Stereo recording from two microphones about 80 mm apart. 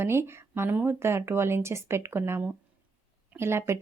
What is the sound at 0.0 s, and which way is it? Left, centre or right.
Speech, right.